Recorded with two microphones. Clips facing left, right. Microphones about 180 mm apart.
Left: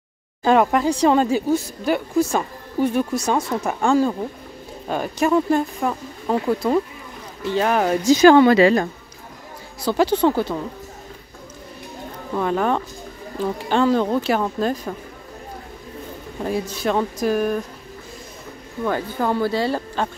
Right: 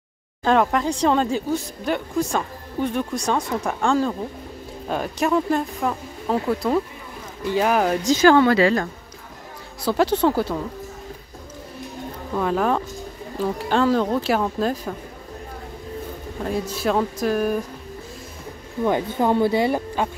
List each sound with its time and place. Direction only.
0.4 s speech: 5° left (ahead or behind)
9.8 s speech: centre (ahead or behind)
12.4 s speech: centre (ahead or behind)
16.4 s speech: centre (ahead or behind)
18.9 s speech: 20° right (ahead or behind)